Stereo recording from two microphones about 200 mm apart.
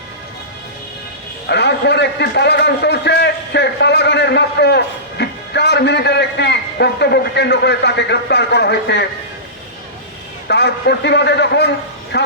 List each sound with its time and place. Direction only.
1.5 s a man's voice: 55° left (ahead or behind)
10.5 s a man's voice: 55° left (ahead or behind)